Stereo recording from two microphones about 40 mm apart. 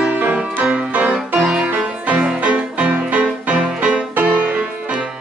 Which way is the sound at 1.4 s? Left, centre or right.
Right.